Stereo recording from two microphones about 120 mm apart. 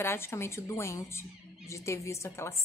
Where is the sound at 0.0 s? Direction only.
20° left (ahead or behind).